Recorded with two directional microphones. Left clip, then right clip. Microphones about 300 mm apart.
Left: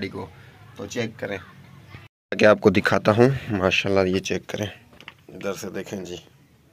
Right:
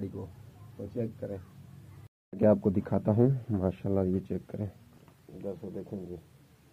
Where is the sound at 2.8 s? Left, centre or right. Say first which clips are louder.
Left 11 dB; centre.